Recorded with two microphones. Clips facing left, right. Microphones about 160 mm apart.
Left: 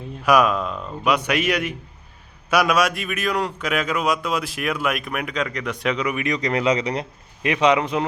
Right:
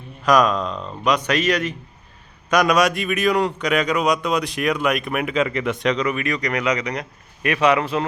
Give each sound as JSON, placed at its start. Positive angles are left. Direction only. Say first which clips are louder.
{"t": 0.3, "sound": "a man's voice", "louder": "right 1 dB", "side_deg": 10}
{"t": 5.8, "sound": "a man's voice", "louder": "even", "side_deg": 10}